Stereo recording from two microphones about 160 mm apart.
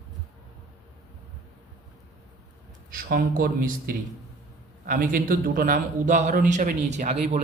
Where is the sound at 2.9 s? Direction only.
65° right (ahead or behind).